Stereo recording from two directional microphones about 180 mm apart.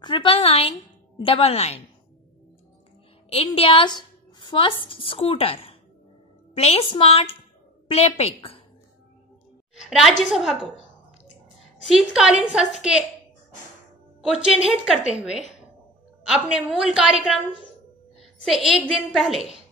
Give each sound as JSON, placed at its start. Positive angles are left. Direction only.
{"t": 0.0, "sound": "a woman's voice", "side_deg": 30}
{"t": 3.3, "sound": "a woman's voice", "side_deg": 35}
{"t": 9.8, "sound": "a woman's voice", "side_deg": 0}
{"t": 11.9, "sound": "a woman's voice", "side_deg": -5}
{"t": 14.2, "sound": "a woman's voice", "side_deg": -5}
{"t": 16.4, "sound": "a woman's voice", "side_deg": -5}